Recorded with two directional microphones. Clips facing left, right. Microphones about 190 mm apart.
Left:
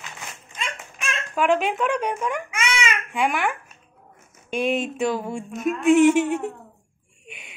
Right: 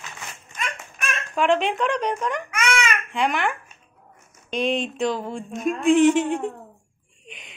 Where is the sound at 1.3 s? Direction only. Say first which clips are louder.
Even; 5° left (ahead or behind).